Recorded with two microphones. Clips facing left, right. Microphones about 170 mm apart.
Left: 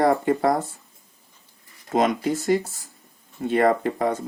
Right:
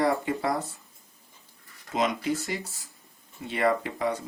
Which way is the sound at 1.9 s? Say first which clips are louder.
Left 6 dB; 45° left (ahead or behind).